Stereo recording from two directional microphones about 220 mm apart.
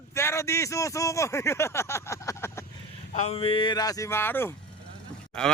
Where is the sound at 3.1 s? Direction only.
30° left (ahead or behind).